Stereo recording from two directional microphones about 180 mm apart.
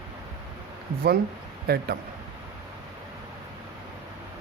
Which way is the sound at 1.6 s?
60° right (ahead or behind).